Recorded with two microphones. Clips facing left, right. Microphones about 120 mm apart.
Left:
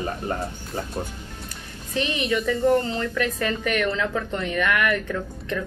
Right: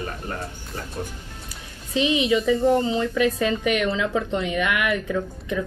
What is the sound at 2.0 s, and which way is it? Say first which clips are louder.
Speech: right 4 dB; 15° right (ahead or behind).